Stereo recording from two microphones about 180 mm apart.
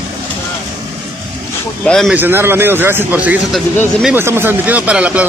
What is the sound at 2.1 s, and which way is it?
Speech, 10° right (ahead or behind).